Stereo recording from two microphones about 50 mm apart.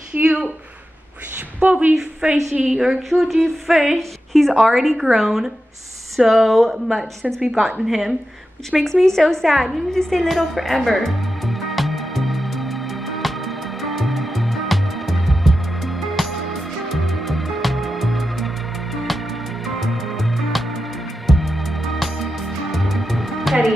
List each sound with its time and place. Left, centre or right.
0.1 s a woman's voice: right
1.6 s a woman's voice: right
2.7 s a woman's voice: centre
9.3 s music: centre
19.6 s music: centre